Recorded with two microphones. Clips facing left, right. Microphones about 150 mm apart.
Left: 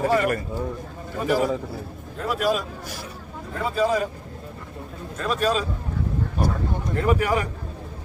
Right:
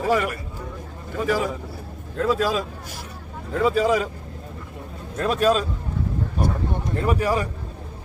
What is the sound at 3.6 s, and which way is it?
Speech, 90° right.